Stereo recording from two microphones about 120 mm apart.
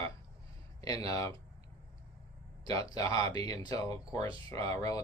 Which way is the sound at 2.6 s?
30° left (ahead or behind).